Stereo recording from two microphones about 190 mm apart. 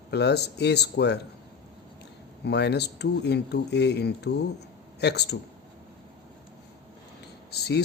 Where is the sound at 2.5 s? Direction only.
60° left (ahead or behind).